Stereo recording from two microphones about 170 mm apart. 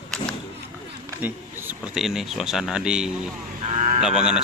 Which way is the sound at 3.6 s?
40° right (ahead or behind).